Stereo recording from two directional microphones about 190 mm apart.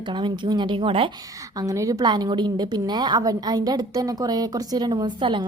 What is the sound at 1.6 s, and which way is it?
A woman's voice, 15° right (ahead or behind).